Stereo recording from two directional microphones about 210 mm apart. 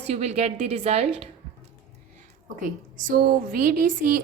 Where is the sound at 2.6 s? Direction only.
40° right (ahead or behind).